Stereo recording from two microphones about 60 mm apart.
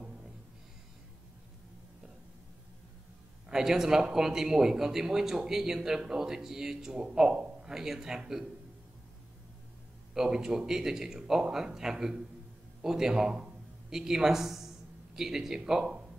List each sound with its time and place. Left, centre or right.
3.4 s speech: centre
10.1 s speech: centre